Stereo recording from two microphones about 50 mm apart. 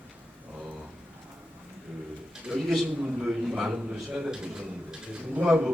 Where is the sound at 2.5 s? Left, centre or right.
Right.